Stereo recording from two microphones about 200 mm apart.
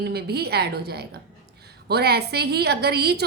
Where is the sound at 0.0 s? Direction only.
55° right (ahead or behind).